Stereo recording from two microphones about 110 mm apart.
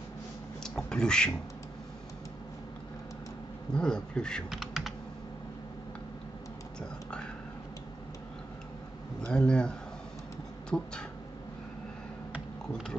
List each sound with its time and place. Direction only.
0.7 s speech: 5° left (ahead or behind)
3.7 s speech: 10° left (ahead or behind)
4.5 s computer keyboard: 5° right (ahead or behind)
9.2 s speech: 10° left (ahead or behind)